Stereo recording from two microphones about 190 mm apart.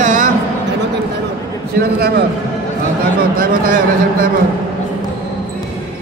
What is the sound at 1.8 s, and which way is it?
Speech, 55° right (ahead or behind).